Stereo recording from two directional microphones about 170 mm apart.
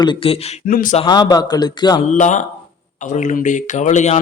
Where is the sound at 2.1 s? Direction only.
45° left (ahead or behind).